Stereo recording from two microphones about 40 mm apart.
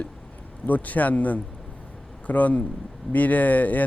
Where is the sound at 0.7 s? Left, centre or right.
Left.